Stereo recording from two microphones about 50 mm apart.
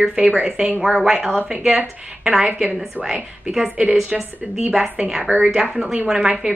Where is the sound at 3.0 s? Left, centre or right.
Right.